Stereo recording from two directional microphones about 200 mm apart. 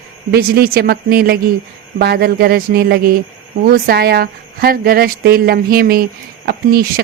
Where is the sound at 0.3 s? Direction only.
50° right (ahead or behind).